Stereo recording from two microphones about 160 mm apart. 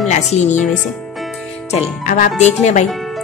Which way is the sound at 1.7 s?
45° left (ahead or behind).